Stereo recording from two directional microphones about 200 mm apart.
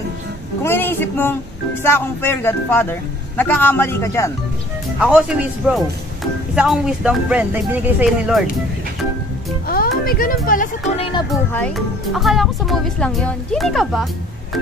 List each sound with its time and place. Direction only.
0.7 s a man's voice: 10° left (ahead or behind)
5.0 s speech: 5° right (ahead or behind)
9.7 s speech: 45° left (ahead or behind)
11.0 s speech: 25° left (ahead or behind)
11.5 s speech: 5° left (ahead or behind)